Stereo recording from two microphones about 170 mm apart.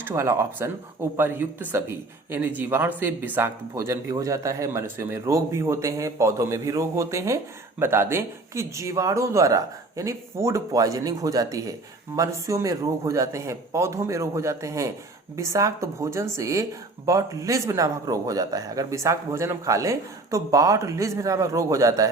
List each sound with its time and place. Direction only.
0.0 s speech: 15° right (ahead or behind)